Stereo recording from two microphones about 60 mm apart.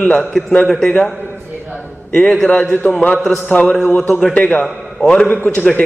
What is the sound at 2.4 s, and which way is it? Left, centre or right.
A man's voice, left.